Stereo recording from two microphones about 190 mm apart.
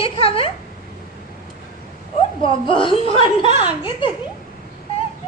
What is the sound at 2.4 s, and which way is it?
A woman's voice, 25° left (ahead or behind).